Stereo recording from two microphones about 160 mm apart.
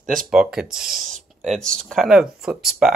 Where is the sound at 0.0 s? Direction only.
60° right (ahead or behind).